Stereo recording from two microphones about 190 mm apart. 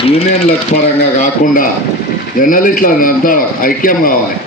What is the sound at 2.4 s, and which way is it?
A man's voice, 45° left (ahead or behind).